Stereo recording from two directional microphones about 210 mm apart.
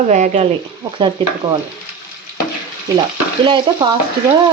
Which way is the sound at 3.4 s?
25° right (ahead or behind).